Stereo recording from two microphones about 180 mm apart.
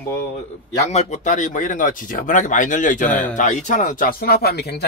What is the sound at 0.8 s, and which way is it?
Speech, 40° left (ahead or behind).